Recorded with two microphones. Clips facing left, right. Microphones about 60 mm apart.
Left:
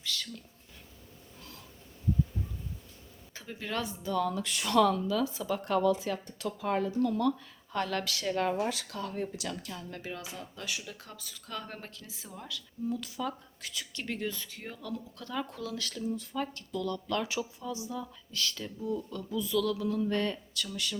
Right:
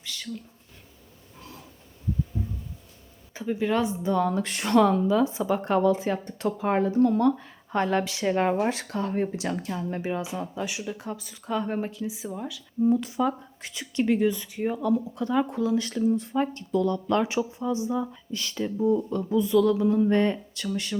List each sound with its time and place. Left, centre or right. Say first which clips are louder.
0.0 s a sound: left 1 dB; centre
2.3 s heart sounds: right 6 dB; centre
3.3 s speech: right 11 dB; centre
8.3 s speech: right 6 dB; right; by 12.6 s centre
13.0 s speech: right 10 dB; right